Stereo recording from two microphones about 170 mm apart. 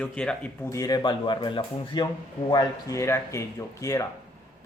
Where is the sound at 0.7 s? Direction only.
20° left (ahead or behind).